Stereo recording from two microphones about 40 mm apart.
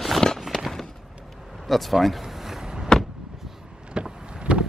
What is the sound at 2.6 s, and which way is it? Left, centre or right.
Power windows, centre.